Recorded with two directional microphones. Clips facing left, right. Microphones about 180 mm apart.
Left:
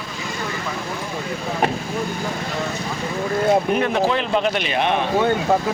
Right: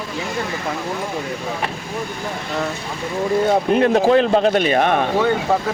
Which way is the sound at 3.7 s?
35° right (ahead or behind).